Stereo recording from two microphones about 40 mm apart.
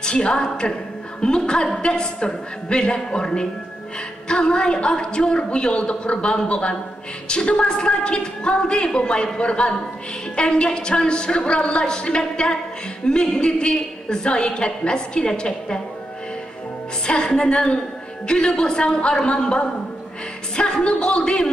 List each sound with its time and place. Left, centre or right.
0.0 s a woman's voice: left
17.0 s a woman's voice: centre